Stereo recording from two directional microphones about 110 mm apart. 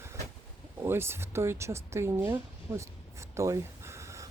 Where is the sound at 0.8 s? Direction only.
20° right (ahead or behind).